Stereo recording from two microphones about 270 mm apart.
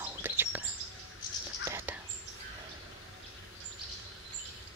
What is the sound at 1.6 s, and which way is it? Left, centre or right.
Whispering, centre.